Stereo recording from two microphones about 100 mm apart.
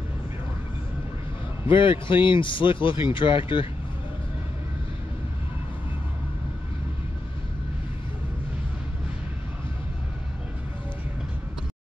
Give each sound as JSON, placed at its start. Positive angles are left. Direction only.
{"t": 1.7, "sound": "speech", "side_deg": 55}